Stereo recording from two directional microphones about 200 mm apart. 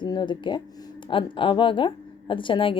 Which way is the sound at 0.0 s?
20° left (ahead or behind).